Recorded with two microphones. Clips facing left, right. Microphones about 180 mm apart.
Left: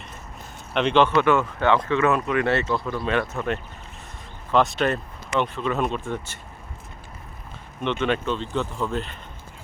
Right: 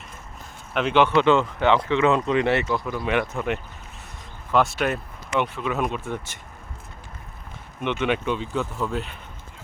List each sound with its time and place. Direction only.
0.7 s speech: 5° right (ahead or behind)
7.8 s speech: 10° right (ahead or behind)